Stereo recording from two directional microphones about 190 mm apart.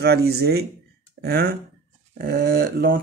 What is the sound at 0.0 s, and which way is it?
Speech, 55° right (ahead or behind).